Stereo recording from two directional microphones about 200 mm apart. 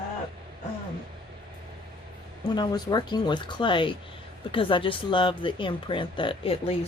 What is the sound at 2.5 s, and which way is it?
Speech, 20° left (ahead or behind).